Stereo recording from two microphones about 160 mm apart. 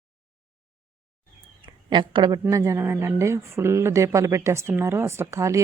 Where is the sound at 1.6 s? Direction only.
30° right (ahead or behind).